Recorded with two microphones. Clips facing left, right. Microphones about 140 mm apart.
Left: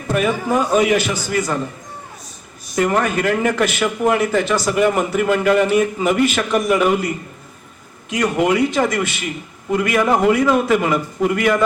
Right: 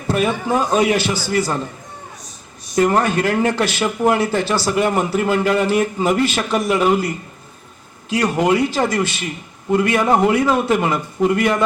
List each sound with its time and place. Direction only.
0.1 s a man's voice: 30° right (ahead or behind)
2.7 s a man's voice: 30° right (ahead or behind)
8.1 s a man's voice: 30° right (ahead or behind)